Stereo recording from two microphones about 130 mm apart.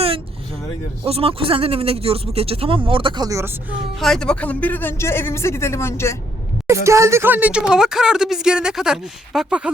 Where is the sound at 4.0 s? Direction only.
5° left (ahead or behind); by 6.1 s 20° left (ahead or behind).